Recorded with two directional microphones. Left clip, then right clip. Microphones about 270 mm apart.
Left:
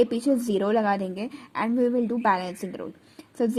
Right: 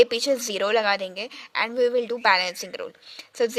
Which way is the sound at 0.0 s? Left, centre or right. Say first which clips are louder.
Right 3 dB; right.